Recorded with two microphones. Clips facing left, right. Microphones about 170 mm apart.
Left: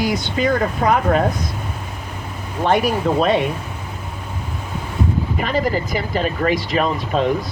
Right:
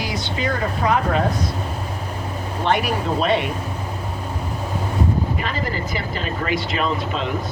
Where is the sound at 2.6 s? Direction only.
45° left (ahead or behind).